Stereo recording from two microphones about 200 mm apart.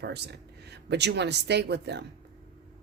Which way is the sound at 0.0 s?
55° right (ahead or behind).